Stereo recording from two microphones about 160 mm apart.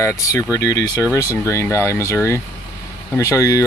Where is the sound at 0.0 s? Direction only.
20° left (ahead or behind).